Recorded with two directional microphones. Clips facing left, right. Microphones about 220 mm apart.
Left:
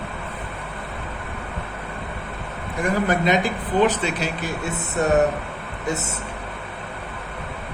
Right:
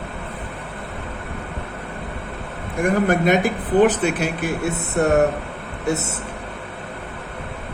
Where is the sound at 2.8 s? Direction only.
55° right (ahead or behind).